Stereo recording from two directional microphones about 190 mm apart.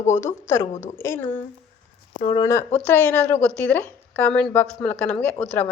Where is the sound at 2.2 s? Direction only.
30° left (ahead or behind).